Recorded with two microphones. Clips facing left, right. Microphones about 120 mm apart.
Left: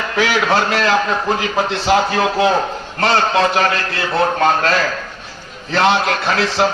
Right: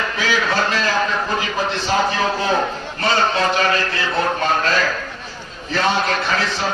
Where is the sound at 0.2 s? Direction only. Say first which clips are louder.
Left 5 dB; 70° left (ahead or behind).